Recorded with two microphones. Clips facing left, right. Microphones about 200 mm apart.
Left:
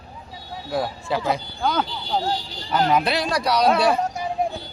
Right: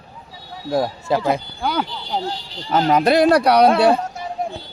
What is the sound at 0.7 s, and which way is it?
Speech, 40° right (ahead or behind).